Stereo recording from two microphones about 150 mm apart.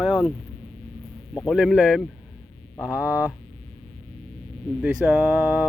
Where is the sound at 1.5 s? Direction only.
5° right (ahead or behind).